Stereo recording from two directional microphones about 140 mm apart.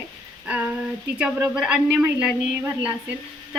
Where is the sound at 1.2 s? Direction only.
5° right (ahead or behind).